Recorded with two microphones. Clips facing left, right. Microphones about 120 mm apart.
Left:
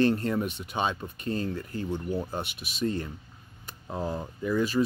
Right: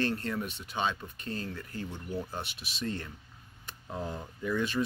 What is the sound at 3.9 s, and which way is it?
Speech, 35° left (ahead or behind).